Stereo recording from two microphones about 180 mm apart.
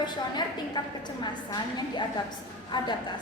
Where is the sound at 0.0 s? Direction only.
25° left (ahead or behind).